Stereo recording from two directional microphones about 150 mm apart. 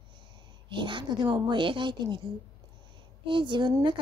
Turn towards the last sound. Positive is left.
turn(degrees=-30)  # may be behind; listen again after turning